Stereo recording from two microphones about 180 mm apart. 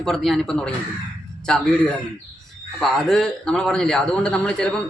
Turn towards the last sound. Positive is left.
turn(degrees=5)  # may be behind; listen again after turning